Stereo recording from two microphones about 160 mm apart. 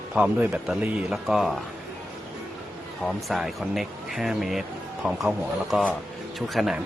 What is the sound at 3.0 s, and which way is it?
Speech, centre (ahead or behind).